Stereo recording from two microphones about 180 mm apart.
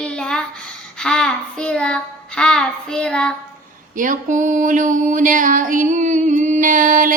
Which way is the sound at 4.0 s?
45° right (ahead or behind).